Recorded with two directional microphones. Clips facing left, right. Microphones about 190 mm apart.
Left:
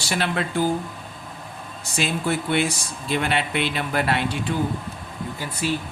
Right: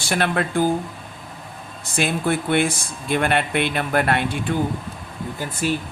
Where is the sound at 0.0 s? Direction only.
55° right (ahead or behind).